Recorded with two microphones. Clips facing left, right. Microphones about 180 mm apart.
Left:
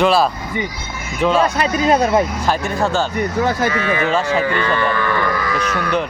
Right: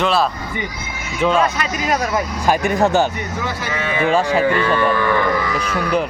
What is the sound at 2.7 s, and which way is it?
Speech, 20° right (ahead or behind).